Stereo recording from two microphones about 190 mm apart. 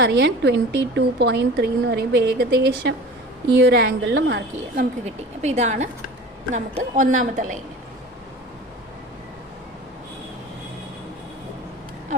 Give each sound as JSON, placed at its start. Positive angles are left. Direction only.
{"t": 0.0, "sound": "a woman's voice", "side_deg": -65}
{"t": 5.0, "sound": "a woman's voice", "side_deg": -35}